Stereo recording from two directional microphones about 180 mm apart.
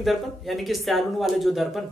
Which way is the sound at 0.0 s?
Centre (ahead or behind).